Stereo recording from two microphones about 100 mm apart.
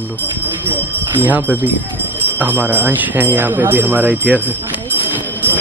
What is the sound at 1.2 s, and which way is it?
Speech, 15° right (ahead or behind).